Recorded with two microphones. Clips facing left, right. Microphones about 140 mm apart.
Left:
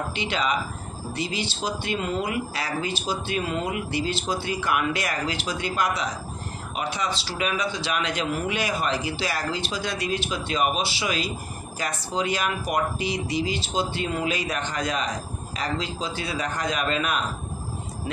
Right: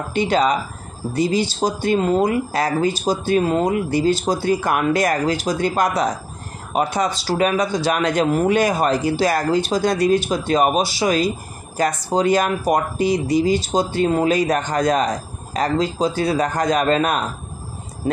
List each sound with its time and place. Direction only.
0.1 s speech: 45° right (ahead or behind)